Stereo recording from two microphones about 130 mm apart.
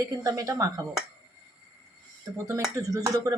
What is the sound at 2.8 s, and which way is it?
Speech, 25° right (ahead or behind).